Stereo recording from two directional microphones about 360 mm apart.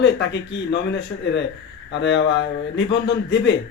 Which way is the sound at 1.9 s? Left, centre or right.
Left.